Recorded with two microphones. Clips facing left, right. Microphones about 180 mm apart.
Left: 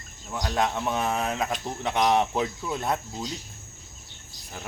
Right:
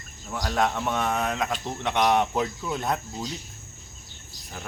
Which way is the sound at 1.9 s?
30° left (ahead or behind).